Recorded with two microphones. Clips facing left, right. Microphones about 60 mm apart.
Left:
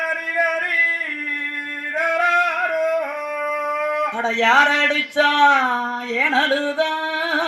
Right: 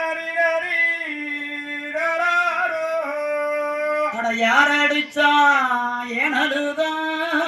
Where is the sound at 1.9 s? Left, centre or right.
Left.